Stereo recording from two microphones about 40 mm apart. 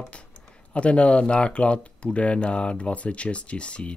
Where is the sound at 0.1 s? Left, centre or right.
Left.